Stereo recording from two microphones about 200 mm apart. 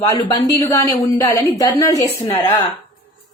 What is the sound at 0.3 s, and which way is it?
A woman's voice, 15° left (ahead or behind).